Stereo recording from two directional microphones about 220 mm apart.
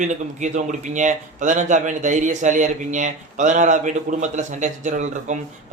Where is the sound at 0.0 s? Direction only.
35° right (ahead or behind).